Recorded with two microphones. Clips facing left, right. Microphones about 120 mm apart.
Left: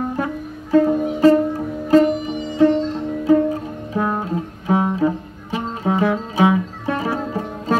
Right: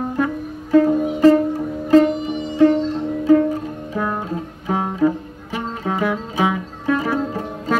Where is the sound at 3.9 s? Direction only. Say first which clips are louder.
Left 3 dB; 15° left (ahead or behind).